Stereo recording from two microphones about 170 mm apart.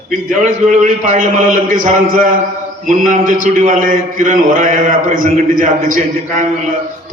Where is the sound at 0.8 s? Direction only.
45° right (ahead or behind).